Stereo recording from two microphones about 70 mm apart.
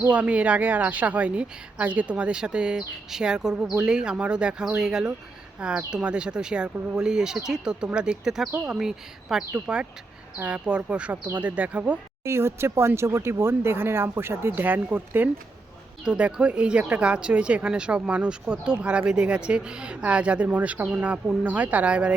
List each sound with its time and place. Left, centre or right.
0.1 s speech: centre
12.2 s speech: right
16.0 s speech: centre